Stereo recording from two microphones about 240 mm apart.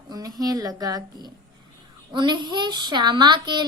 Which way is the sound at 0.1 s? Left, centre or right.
Centre.